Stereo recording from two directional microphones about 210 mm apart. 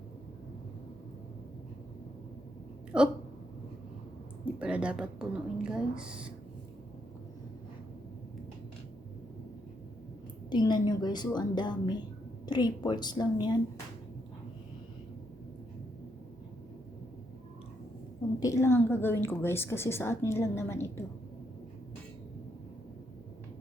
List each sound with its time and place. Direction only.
2.9 s speech: 5° right (ahead or behind)
4.6 s speech: 5° right (ahead or behind)
10.5 s a woman's voice: 20° left (ahead or behind)
18.3 s a woman's voice: 15° left (ahead or behind)